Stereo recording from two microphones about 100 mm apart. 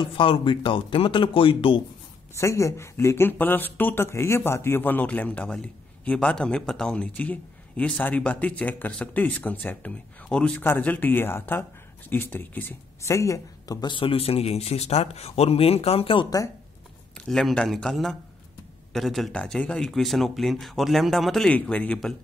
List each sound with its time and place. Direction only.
0.0 s speech: 60° left (ahead or behind)
2.3 s speech: 30° left (ahead or behind)
13.0 s a woman's voice: 30° left (ahead or behind); by 16.3 s 70° left (ahead or behind)
17.3 s a man's voice: 5° left (ahead or behind)